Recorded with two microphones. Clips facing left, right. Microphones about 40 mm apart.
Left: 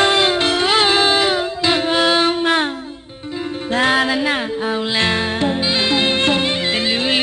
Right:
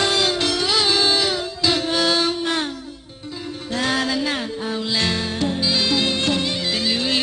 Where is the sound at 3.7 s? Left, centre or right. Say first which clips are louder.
Left 6 dB; left.